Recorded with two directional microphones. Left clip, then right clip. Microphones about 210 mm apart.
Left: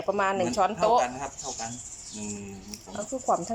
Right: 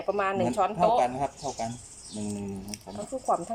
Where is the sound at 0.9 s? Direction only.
20° right (ahead or behind).